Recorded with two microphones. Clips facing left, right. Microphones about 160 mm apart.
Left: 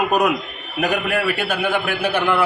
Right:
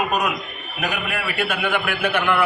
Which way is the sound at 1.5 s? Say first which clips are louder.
Left 2 dB; 30° left (ahead or behind).